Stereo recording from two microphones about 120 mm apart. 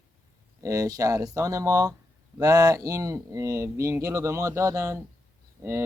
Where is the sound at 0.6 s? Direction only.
25° right (ahead or behind).